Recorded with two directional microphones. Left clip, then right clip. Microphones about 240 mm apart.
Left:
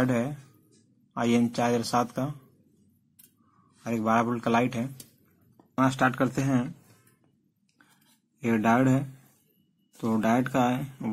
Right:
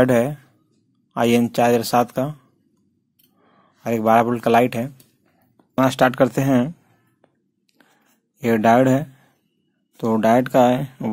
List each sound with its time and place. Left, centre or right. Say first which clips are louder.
0.0 s speech: right 11 dB; right
3.8 s speech: right 10 dB; right
8.4 s speech: right 9 dB; right